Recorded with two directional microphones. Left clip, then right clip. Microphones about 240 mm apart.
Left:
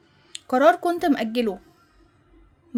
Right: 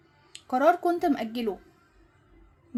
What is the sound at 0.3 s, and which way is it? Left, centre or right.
A woman's voice, left.